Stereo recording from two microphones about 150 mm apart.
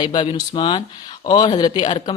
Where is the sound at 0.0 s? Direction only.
30° left (ahead or behind).